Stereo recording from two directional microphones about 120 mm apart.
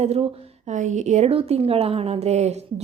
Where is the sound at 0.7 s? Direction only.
90° right.